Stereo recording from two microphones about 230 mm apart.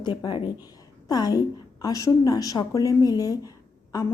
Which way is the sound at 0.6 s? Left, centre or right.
Centre.